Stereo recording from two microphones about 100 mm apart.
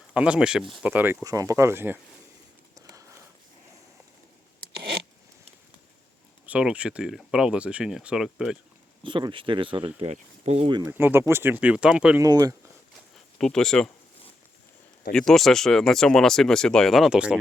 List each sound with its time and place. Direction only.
0.1 s speech: 10° right (ahead or behind)
0.9 s speech: 20° right (ahead or behind)
1.2 s speech: 35° right (ahead or behind)
2.7 s a sound: 35° right (ahead or behind)
6.4 s speech: 10° right (ahead or behind)
9.0 s speech: 55° right (ahead or behind)
10.0 s speech: 90° right
10.8 s speech: 20° right (ahead or behind)
12.2 s speech: 40° right (ahead or behind)
13.4 s speech: 5° left (ahead or behind)
15.1 s speech: 5° left (ahead or behind)